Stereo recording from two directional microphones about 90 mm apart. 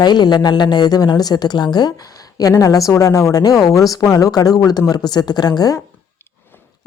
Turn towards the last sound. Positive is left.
turn(degrees=50)  # may be behind; listen again after turning